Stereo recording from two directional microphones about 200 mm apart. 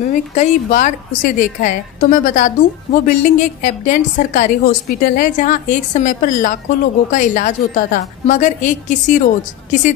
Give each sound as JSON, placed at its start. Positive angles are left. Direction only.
{"t": 0.1, "sound": "a woman's voice", "side_deg": 35}